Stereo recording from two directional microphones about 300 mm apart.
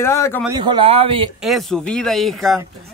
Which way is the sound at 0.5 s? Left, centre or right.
Centre.